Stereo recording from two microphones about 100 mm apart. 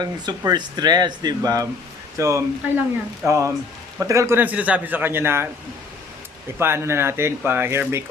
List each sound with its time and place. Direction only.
0.0 s speech: 45° right (ahead or behind); by 2.4 s 30° right (ahead or behind)
2.6 s speech: 15° right (ahead or behind)
3.2 s a man's voice: 30° right (ahead or behind)
4.4 s speech: 15° right (ahead or behind)
6.6 s speech: 25° right (ahead or behind)